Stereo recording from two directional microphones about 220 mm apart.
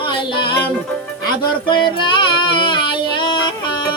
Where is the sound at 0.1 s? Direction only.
20° left (ahead or behind).